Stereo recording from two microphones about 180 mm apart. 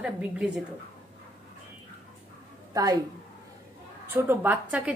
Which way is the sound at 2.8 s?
20° right (ahead or behind).